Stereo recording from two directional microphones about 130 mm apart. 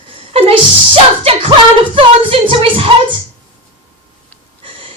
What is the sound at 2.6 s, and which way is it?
Music, 45° right (ahead or behind).